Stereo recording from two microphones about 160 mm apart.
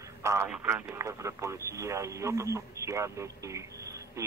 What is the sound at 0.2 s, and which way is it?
Speech, 15° right (ahead or behind).